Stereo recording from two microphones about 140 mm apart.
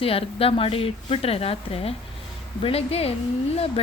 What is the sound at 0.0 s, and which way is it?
A woman's voice, 40° left (ahead or behind).